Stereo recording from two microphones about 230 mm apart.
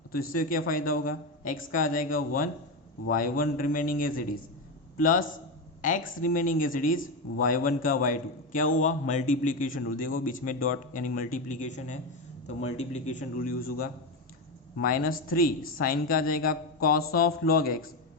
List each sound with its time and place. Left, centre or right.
0.1 s a man's voice: left